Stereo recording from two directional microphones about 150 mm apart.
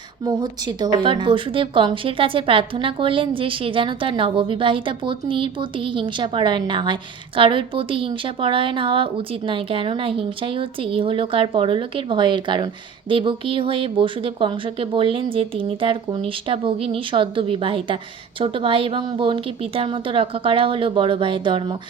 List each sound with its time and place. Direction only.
0.3 s speech: 25° right (ahead or behind)